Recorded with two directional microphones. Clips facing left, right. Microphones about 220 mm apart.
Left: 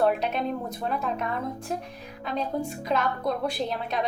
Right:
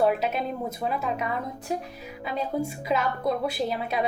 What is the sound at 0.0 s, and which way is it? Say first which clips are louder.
A woman's voice: even; 5° right (ahead or behind).